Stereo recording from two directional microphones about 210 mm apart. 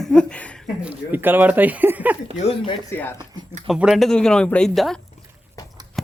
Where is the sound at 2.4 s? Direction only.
25° left (ahead or behind).